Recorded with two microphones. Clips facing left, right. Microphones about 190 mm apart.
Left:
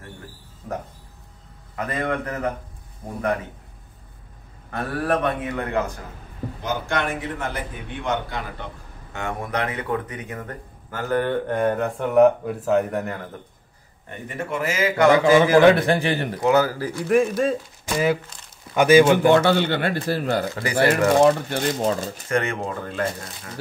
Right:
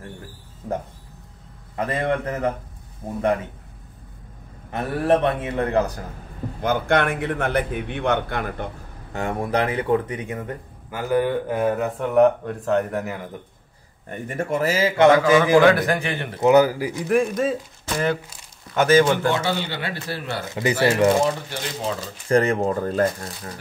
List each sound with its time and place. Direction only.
1.8 s speech: 30° right (ahead or behind)
4.6 s speech: 25° right (ahead or behind)
6.6 s a man's voice: 60° right (ahead or behind)
9.1 s speech: 35° right (ahead or behind)
10.9 s speech: 10° right (ahead or behind)
14.2 s speech: 45° right (ahead or behind); by 15.1 s 25° right (ahead or behind)
15.1 s a man's voice: 20° left (ahead or behind)
16.3 s speech: 20° right (ahead or behind)
17.0 s a man's voice: centre (ahead or behind)
19.3 s speech: 55° left (ahead or behind)
21.2 s speech: 55° left (ahead or behind)
22.3 s speech: 35° right (ahead or behind)